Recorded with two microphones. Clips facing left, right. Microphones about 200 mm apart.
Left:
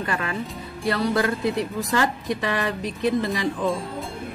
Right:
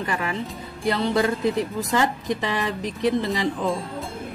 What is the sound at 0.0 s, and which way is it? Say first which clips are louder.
A woman's voice: even; 15° right (ahead or behind).